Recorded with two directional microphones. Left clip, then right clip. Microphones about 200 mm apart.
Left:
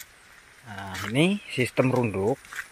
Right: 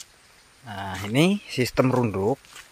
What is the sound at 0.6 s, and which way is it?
Speech, 30° right (ahead or behind).